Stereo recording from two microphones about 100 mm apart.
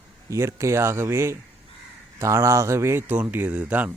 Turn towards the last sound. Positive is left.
turn(degrees=-15)  # may be behind; listen again after turning